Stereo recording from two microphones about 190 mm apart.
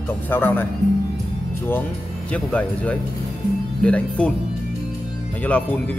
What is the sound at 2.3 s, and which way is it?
Speech, 5° left (ahead or behind).